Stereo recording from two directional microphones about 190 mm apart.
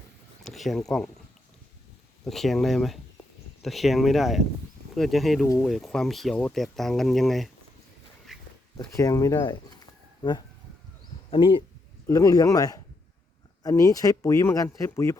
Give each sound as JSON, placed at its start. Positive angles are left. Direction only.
{"t": 0.4, "sound": "speech", "side_deg": 0}
{"t": 2.2, "sound": "speech", "side_deg": 0}
{"t": 8.3, "sound": "dog", "side_deg": 0}
{"t": 8.8, "sound": "speech", "side_deg": 20}
{"t": 11.3, "sound": "speech", "side_deg": 25}